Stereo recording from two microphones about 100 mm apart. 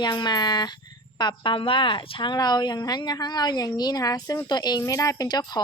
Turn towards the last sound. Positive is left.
turn(degrees=40)  # may be behind; listen again after turning